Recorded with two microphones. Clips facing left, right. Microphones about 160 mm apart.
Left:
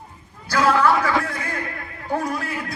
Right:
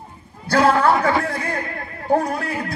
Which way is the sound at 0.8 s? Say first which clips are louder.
Right 2 dB; 50° right (ahead or behind).